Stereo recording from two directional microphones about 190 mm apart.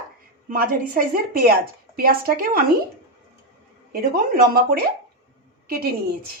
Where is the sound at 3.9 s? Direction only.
50° right (ahead or behind).